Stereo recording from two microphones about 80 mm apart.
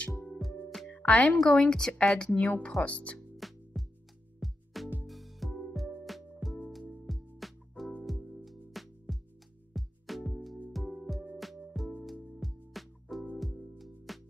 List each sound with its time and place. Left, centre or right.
0.4 s music: centre
0.9 s music: centre
1.4 s speech: centre
3.3 s music: centre